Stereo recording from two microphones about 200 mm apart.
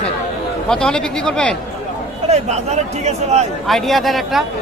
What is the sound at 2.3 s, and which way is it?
A man's voice, 35° right (ahead or behind).